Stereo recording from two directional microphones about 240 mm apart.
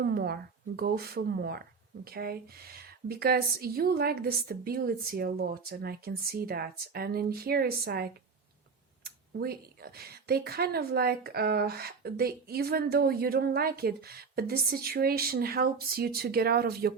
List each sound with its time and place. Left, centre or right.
0.0 s a woman's voice: right
9.4 s a woman's voice: right